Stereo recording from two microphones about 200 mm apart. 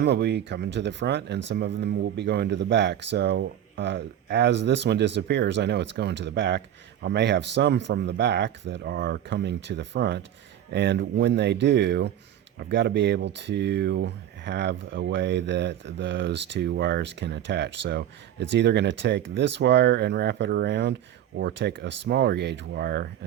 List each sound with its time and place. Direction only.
0.0 s speech: 60° right (ahead or behind)